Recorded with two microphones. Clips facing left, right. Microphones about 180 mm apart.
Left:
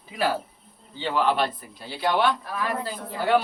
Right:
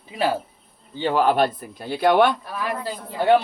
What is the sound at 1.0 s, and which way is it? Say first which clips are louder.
A man's voice: right 5 dB; 45° right (ahead or behind).